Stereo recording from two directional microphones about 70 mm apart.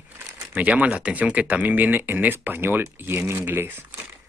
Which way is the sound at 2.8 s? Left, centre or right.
Right.